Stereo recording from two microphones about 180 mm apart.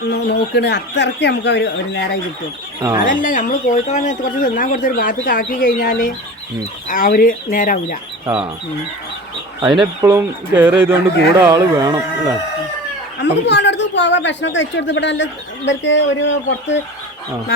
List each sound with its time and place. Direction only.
0.1 s speech: 70° left (ahead or behind)
3.0 s speech: 45° left (ahead or behind)
10.0 s speech: 15° right (ahead or behind)
13.2 s speech: 75° left (ahead or behind); by 16.8 s 90° left